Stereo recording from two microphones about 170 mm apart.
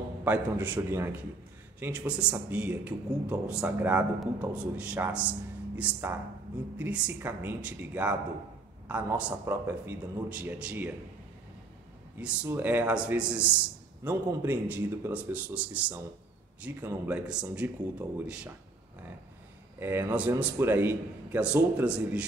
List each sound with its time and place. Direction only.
0.2 s a man's voice: 10° right (ahead or behind)
12.2 s a man's voice: 10° right (ahead or behind)
19.8 s a man's voice: 15° right (ahead or behind)